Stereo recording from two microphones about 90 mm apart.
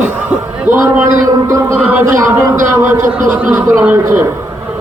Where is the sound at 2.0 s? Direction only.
35° right (ahead or behind).